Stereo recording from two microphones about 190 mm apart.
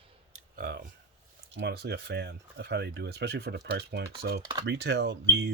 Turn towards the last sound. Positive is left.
turn(degrees=-60)  # may be behind; listen again after turning